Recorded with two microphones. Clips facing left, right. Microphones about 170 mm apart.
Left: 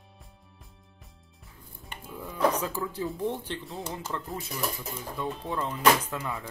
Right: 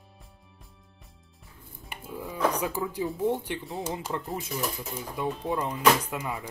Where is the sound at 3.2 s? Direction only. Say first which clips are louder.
Right 4 dB; 15° right (ahead or behind).